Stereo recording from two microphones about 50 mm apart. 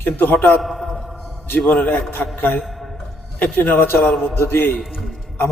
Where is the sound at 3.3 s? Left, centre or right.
Left.